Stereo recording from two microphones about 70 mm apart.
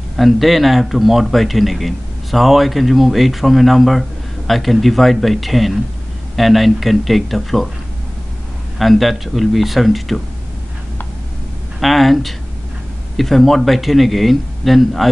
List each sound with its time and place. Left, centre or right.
0.2 s a man's voice: centre
8.7 s a man's voice: centre
11.8 s a man's voice: centre